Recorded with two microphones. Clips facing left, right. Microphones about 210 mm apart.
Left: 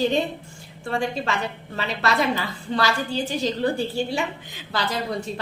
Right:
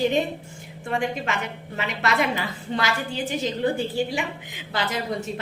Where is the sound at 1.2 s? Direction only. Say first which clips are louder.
Left 2 dB; 35° left (ahead or behind).